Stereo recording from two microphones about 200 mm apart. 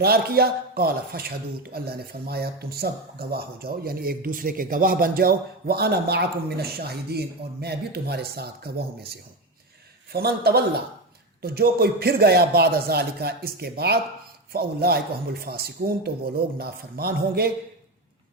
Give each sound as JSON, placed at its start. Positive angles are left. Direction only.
{"t": 0.0, "sound": "speech", "side_deg": -50}